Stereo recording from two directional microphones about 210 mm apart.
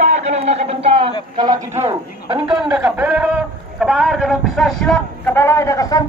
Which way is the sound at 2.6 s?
5° right (ahead or behind).